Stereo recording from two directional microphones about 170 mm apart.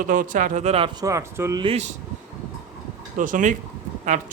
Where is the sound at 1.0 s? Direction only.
20° right (ahead or behind).